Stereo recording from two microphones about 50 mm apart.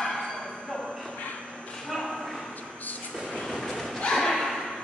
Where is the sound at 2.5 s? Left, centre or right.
Left.